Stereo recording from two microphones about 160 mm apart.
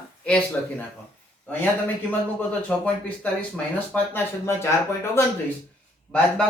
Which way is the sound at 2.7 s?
5° left (ahead or behind).